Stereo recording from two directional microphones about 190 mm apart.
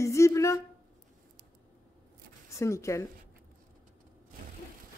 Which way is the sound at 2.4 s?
15° left (ahead or behind).